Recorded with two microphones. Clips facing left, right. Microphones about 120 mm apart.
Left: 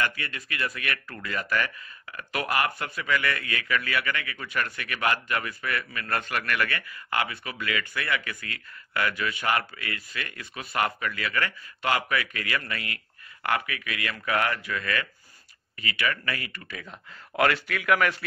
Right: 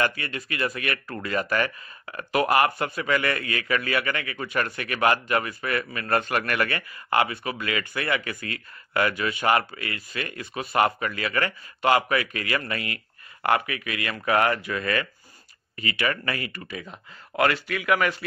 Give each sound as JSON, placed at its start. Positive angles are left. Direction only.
{"t": 0.0, "sound": "speech", "side_deg": -30}
{"t": 17.4, "sound": "speech", "side_deg": -5}